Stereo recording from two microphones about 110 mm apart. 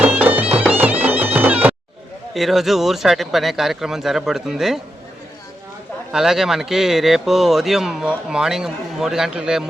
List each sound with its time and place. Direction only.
0.0 s music: 15° right (ahead or behind)
0.7 s bagpipes: 15° right (ahead or behind)
2.3 s speech: centre (ahead or behind)
6.1 s speech: 5° right (ahead or behind)